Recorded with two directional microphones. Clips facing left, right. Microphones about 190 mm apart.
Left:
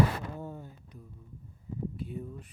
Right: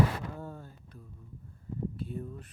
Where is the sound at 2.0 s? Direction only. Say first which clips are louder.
Even; 10° left (ahead or behind).